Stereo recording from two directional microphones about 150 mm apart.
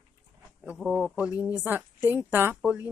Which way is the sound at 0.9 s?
Centre (ahead or behind).